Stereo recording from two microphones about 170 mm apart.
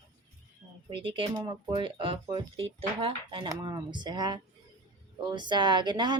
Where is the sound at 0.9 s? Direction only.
30° right (ahead or behind).